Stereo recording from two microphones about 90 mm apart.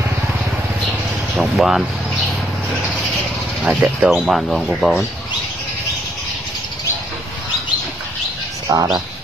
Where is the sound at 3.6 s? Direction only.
15° right (ahead or behind).